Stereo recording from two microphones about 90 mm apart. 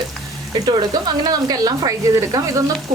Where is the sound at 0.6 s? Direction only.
50° right (ahead or behind).